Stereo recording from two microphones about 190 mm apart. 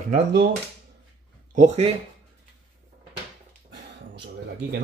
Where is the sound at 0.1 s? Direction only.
60° right (ahead or behind).